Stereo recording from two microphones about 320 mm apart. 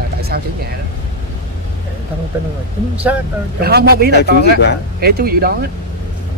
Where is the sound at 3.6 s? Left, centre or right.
Right.